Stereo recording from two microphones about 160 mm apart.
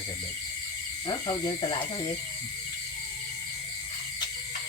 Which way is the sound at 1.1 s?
30° left (ahead or behind).